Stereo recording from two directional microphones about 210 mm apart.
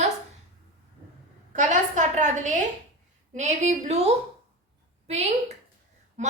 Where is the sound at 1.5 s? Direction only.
35° right (ahead or behind).